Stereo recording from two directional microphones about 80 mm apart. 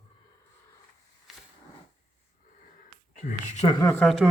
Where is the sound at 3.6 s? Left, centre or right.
Left.